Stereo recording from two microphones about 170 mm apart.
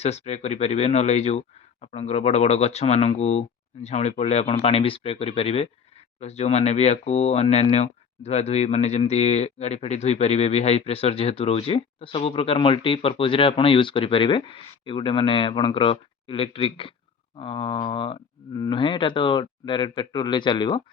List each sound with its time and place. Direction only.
0.0 s speech: 40° left (ahead or behind)